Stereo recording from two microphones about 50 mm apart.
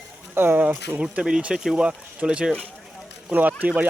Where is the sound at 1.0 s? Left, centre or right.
Centre.